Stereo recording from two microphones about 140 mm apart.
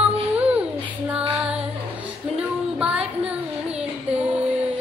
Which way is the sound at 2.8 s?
5° right (ahead or behind).